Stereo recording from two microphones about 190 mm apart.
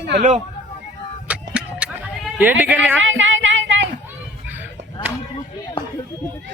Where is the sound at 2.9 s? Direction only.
80° right.